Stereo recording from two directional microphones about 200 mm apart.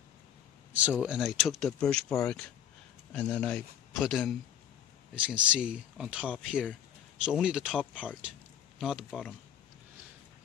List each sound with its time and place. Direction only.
0.7 s speech: 5° right (ahead or behind)